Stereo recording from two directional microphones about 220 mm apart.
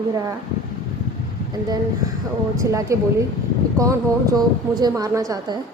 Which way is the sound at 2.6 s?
15° right (ahead or behind).